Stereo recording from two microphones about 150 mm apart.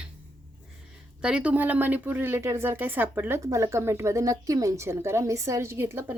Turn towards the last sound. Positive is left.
turn(degrees=-15)  # may be behind; listen again after turning